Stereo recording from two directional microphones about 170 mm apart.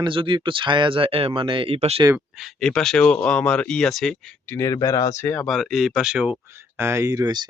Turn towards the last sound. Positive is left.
turn(degrees=-25)  # may be behind; listen again after turning